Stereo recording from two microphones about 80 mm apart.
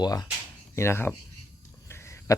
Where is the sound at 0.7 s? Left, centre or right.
Left.